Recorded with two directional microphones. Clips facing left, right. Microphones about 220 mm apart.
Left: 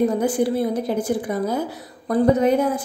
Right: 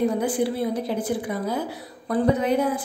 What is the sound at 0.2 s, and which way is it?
A woman's voice, 45° left (ahead or behind).